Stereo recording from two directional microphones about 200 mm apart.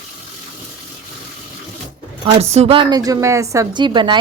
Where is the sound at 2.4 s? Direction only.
30° right (ahead or behind).